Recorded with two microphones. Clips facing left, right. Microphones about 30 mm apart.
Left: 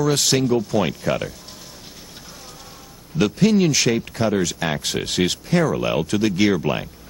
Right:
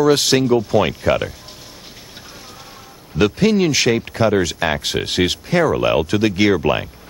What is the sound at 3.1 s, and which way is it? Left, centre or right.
Speech, centre.